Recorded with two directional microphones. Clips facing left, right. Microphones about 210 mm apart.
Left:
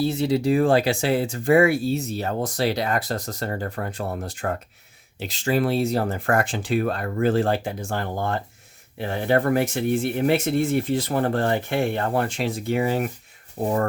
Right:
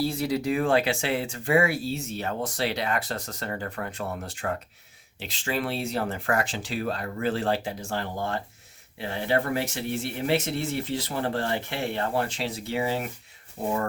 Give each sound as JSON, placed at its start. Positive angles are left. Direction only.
{"t": 0.0, "sound": "speech", "side_deg": 25}
{"t": 13.6, "sound": "speech", "side_deg": 65}